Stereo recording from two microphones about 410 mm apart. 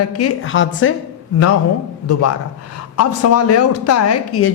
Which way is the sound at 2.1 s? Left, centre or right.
Left.